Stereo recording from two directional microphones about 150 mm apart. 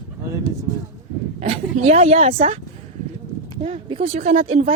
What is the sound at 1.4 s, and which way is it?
Speech, 40° right (ahead or behind).